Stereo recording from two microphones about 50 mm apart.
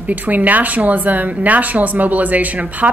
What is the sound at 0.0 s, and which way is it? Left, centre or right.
Speech, right.